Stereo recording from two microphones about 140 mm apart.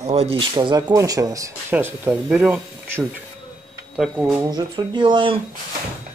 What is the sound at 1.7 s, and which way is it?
Speech, 10° right (ahead or behind).